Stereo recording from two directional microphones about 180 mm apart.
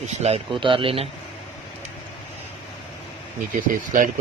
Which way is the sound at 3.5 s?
45° right (ahead or behind).